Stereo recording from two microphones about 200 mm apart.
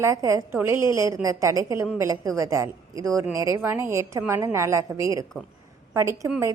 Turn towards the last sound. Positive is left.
turn(degrees=-15)  # may be behind; listen again after turning